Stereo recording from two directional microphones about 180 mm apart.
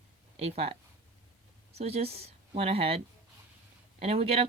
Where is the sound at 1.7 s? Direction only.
35° right (ahead or behind).